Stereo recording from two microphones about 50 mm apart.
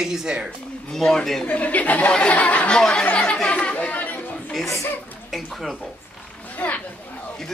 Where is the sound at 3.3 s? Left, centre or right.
Left.